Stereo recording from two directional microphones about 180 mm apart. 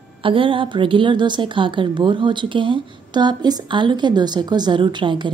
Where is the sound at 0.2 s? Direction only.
30° right (ahead or behind).